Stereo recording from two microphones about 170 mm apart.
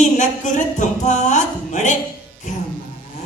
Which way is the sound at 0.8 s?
45° left (ahead or behind).